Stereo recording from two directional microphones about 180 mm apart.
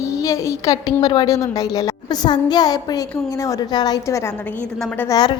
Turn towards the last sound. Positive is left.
turn(degrees=10)  # may be behind; listen again after turning